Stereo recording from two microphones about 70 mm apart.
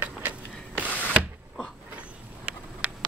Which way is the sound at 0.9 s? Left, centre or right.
Left.